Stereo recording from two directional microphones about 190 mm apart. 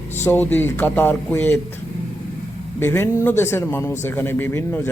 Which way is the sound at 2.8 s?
15° left (ahead or behind).